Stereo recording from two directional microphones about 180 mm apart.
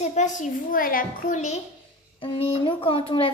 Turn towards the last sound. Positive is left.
turn(degrees=30)  # may be behind; listen again after turning